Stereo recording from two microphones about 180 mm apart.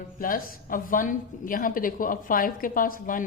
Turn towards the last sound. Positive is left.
turn(degrees=50)  # may be behind; listen again after turning